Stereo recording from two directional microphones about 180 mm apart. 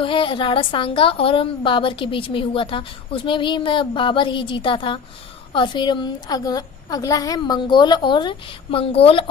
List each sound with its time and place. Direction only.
0.0 s a woman's voice: 30° left (ahead or behind)